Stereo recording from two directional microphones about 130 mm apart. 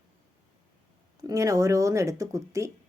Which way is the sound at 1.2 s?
25° right (ahead or behind).